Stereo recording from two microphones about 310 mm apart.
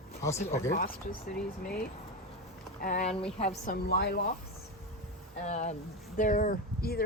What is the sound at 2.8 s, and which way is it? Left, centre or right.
Speech, left.